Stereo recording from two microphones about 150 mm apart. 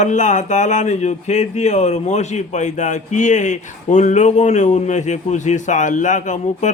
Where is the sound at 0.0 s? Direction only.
55° left (ahead or behind).